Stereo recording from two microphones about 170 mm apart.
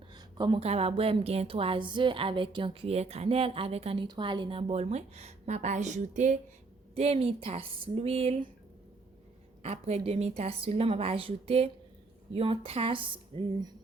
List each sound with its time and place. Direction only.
0.1 s a woman's voice: 25° right (ahead or behind)
9.6 s a woman's voice: 40° right (ahead or behind)